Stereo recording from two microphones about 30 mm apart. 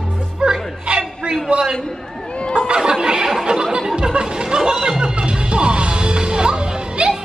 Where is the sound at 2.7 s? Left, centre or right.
Right.